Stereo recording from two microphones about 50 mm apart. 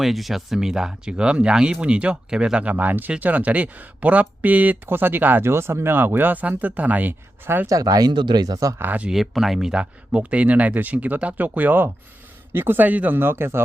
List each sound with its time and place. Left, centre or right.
0.0 s speech: centre; by 2.7 s right
2.7 s speech: right
4.9 s speech: right
5.5 s speech: right
8.6 s speech: right
9.0 s speech: centre; by 13.1 s right
13.1 s a man's voice: right